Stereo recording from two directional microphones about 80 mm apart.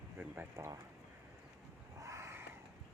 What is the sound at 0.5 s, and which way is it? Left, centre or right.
Speech, right.